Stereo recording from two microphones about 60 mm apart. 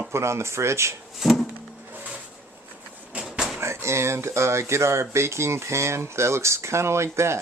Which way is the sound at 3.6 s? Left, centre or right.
Right.